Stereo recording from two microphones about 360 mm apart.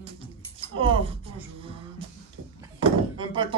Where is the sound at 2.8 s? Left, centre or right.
Centre.